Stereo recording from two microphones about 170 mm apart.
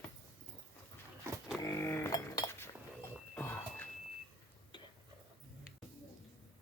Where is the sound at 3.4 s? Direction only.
10° left (ahead or behind).